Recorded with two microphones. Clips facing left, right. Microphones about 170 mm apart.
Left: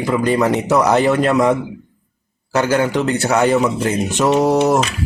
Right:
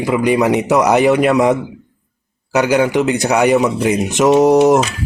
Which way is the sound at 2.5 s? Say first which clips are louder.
Right 3 dB; 15° right (ahead or behind).